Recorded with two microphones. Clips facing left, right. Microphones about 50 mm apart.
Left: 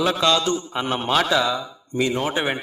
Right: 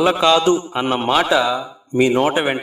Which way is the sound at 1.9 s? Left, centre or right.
Right.